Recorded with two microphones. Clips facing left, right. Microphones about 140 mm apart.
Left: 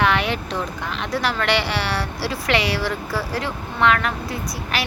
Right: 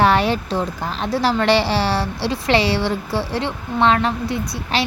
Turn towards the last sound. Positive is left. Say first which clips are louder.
# right 4 dB
turn(degrees=-25)  # may be behind; listen again after turning